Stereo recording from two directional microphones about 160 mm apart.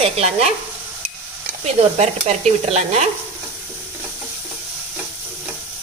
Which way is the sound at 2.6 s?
45° right (ahead or behind).